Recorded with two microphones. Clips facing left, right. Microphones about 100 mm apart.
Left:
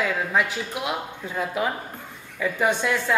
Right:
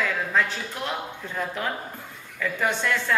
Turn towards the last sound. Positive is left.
turn(degrees=15)  # may be behind; listen again after turning